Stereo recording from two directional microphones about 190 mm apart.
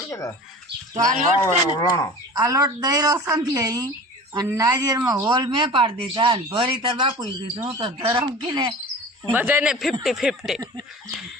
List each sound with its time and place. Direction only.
0.1 s bird: 15° left (ahead or behind)
0.9 s speech: 40° right (ahead or behind)
1.4 s speech: 20° left (ahead or behind)
2.3 s speech: 20° right (ahead or behind)
9.3 s speech: 10° right (ahead or behind)